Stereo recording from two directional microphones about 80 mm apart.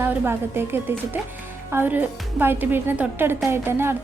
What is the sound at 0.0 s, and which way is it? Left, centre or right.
A woman's voice, right.